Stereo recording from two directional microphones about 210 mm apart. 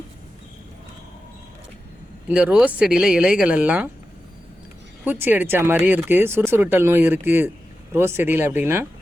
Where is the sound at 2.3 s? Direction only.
5° right (ahead or behind).